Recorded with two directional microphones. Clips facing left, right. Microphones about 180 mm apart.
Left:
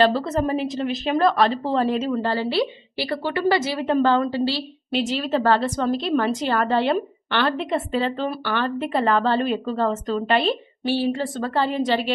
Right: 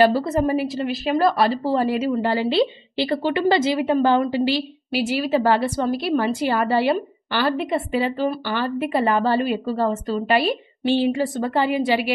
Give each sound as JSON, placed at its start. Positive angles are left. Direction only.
{"t": 0.0, "sound": "a woman's voice", "side_deg": -10}